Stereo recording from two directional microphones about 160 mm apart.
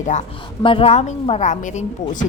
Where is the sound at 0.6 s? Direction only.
35° left (ahead or behind); by 2.2 s 50° left (ahead or behind).